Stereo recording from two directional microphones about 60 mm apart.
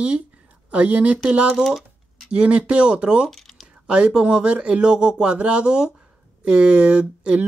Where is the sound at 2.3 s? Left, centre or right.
Centre.